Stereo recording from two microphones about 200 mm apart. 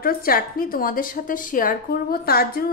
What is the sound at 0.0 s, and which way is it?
A woman's voice, 45° left (ahead or behind).